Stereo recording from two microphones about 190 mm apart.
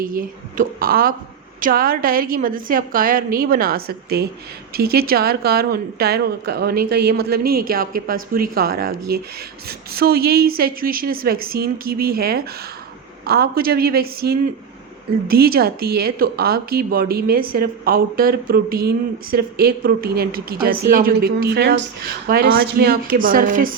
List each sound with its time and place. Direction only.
0.0 s speech: 45° right (ahead or behind)